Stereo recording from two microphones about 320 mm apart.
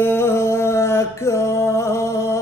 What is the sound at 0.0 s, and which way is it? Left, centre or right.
Music, centre.